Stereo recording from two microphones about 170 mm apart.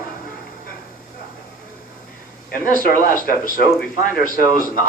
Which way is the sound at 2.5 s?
55° left (ahead or behind).